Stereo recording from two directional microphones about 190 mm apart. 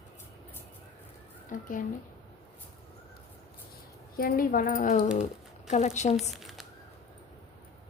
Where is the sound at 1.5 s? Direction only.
45° left (ahead or behind).